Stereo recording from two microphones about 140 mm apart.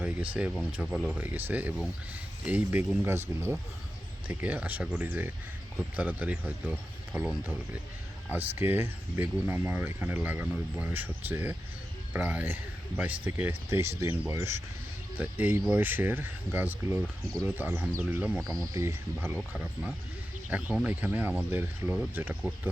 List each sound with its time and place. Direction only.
0.0 s speech: 10° right (ahead or behind)
18.5 s speech: 25° right (ahead or behind)
19.4 s speech: 5° right (ahead or behind)